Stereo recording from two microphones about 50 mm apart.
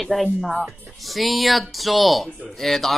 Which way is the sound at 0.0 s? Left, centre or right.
Centre.